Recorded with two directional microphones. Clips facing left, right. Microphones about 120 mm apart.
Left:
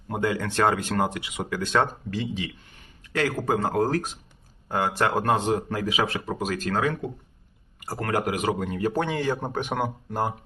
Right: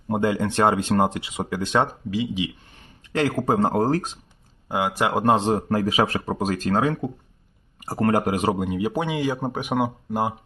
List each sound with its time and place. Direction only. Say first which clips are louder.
0.1 s speech: right 4 dB; 25° right (ahead or behind)
3.2 s speech: right 4 dB; 25° right (ahead or behind)
4.7 s speech: right 1 dB; 10° right (ahead or behind); by 5.6 s 30° right (ahead or behind)
5.6 s speech: right 5 dB; 40° right (ahead or behind)
8.5 s speech: right 1 dB; 15° right (ahead or behind)